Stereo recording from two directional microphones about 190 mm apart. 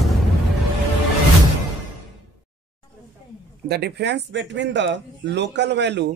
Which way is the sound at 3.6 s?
60° right (ahead or behind).